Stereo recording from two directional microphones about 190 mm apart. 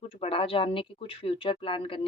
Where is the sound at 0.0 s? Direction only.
30° left (ahead or behind).